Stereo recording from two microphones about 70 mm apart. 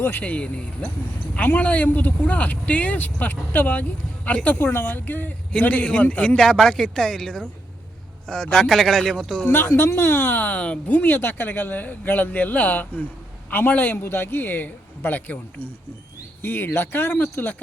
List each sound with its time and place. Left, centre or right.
0.0 s speech: left
0.3 s a man's voice: centre
9.5 s speech: left